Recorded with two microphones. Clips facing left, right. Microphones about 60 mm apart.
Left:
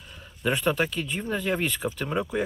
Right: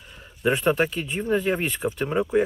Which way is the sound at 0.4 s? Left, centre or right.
Centre.